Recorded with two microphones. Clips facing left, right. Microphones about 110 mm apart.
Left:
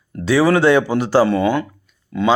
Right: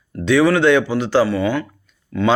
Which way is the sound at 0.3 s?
35° left (ahead or behind).